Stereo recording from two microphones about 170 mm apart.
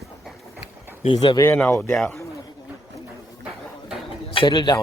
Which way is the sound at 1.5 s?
10° left (ahead or behind).